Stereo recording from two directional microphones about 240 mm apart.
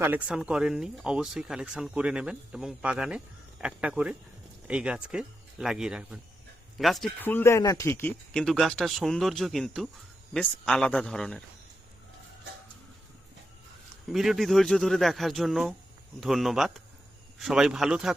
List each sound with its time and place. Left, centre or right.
0.0 s speech: centre
14.1 s speech: centre